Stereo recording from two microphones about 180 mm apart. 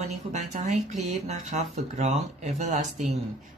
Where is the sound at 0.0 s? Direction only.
40° right (ahead or behind).